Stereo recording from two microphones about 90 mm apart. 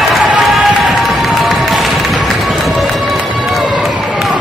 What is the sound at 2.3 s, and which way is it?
Run, centre (ahead or behind).